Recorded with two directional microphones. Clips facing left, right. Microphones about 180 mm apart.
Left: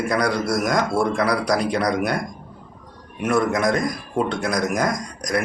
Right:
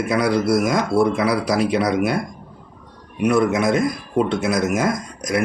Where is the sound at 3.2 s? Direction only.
Centre (ahead or behind).